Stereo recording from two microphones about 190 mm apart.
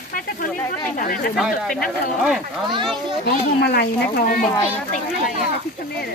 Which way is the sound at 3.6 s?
55° left (ahead or behind).